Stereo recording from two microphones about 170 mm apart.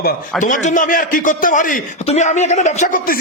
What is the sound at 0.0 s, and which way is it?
A man's voice, 55° left (ahead or behind).